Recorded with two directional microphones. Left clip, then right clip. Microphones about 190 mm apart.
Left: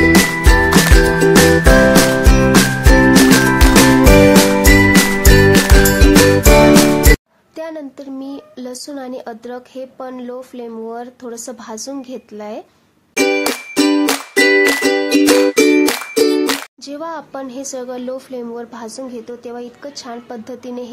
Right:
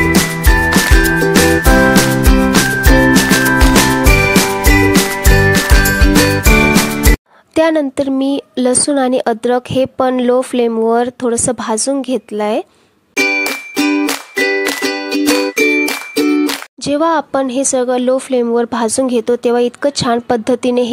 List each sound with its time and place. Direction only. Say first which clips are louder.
0.1 s music: left 1 dB; centre (ahead or behind)
7.5 s speech: right 15 dB; 50° right (ahead or behind)
13.1 s music: right 2 dB; 5° left (ahead or behind)
16.8 s speech: right 13 dB; 40° right (ahead or behind)